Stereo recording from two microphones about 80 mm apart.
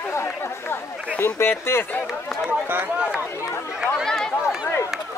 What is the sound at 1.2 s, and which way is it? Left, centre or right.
Speech, left.